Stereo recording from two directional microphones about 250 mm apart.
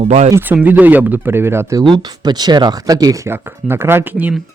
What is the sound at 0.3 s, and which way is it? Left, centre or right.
Speech, centre.